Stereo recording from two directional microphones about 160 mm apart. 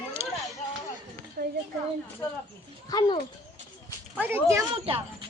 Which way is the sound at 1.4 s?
70° right (ahead or behind).